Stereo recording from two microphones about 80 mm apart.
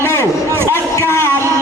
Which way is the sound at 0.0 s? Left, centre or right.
Left.